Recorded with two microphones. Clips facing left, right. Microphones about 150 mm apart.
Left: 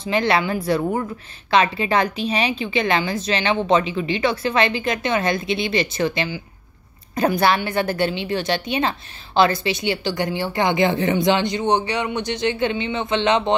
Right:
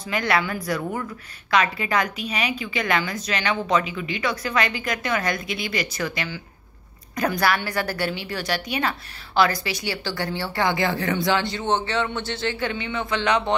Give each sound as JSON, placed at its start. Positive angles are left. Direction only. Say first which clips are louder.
{"t": 0.0, "sound": "a woman's voice", "louder": "left 4 dB", "side_deg": 25}